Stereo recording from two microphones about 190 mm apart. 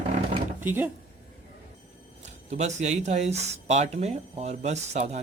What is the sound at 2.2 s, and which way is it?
Speech, 35° right (ahead or behind).